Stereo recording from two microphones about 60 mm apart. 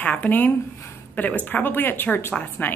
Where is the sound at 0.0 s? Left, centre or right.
Left.